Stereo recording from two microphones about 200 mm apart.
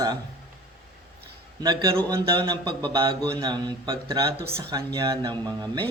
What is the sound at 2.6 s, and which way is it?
Speech, 25° right (ahead or behind).